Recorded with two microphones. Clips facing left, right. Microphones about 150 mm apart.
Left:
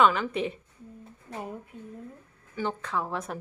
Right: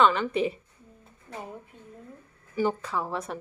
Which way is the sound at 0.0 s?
Centre (ahead or behind).